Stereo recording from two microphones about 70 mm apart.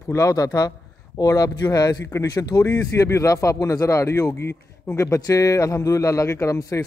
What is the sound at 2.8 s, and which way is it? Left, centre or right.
Speech, left.